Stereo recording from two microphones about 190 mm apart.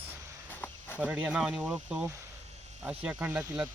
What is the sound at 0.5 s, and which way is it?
Cricket, 10° left (ahead or behind).